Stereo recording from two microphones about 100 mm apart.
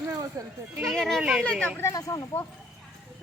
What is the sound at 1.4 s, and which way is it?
Speech, 10° left (ahead or behind).